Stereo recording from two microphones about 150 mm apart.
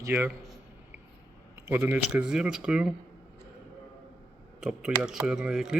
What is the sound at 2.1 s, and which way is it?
Speech, 5° right (ahead or behind).